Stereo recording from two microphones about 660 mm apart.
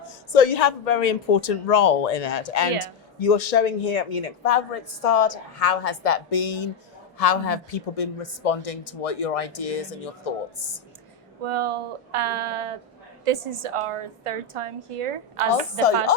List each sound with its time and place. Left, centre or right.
0.3 s a woman's voice: left
7.2 s speech: left
11.4 s a woman's voice: right